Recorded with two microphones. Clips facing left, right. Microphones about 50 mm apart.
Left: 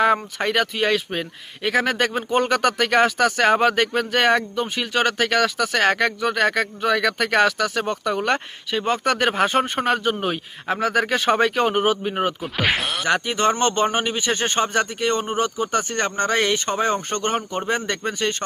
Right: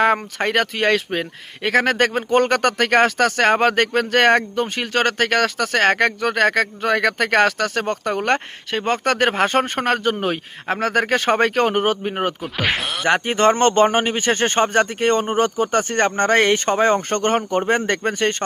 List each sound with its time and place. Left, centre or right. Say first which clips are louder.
0.0 s speech: right 1 dB; right
12.4 s speech: even; centre
13.1 s speech: right 4 dB; right